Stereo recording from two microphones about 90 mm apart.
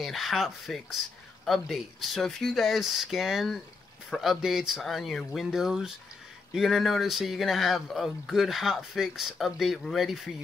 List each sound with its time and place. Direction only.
0.0 s speech: centre (ahead or behind)